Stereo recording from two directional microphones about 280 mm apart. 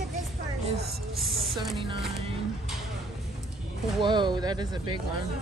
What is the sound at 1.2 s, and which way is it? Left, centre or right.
Speech, centre.